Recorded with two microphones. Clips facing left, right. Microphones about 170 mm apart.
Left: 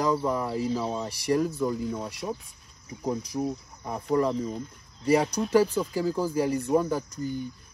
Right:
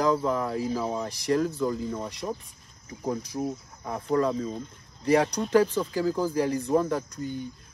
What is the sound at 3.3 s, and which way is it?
Speech, 5° left (ahead or behind).